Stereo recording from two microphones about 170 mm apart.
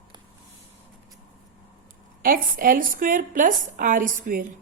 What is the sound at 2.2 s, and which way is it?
A woman's voice, 55° right (ahead or behind).